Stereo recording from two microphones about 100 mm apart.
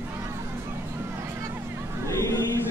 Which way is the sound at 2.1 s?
30° left (ahead or behind).